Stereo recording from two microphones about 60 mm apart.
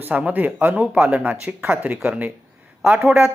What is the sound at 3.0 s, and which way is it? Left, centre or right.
Speech, centre.